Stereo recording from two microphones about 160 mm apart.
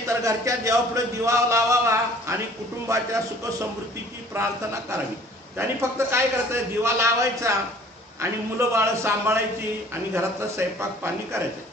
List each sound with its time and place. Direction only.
0.2 s speech: 20° right (ahead or behind)
4.3 s speech: 20° right (ahead or behind)
5.6 s a man's voice: 15° right (ahead or behind)